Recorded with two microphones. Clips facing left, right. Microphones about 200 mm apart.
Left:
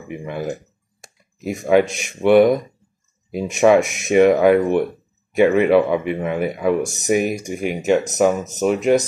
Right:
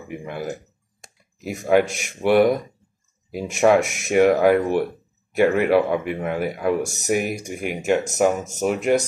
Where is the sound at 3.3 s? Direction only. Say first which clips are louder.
Left 3 dB; 5° right (ahead or behind).